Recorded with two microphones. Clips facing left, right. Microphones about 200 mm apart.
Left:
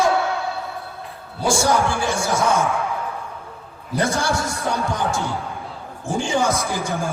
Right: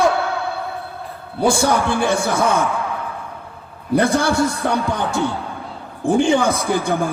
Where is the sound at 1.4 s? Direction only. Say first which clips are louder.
Right 2 dB; 60° right (ahead or behind).